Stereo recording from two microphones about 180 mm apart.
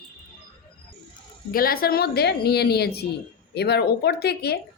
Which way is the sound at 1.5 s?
55° left (ahead or behind).